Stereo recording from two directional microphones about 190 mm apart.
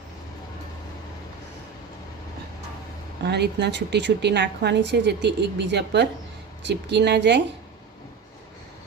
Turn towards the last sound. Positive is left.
turn(degrees=-65)  # may be behind; listen again after turning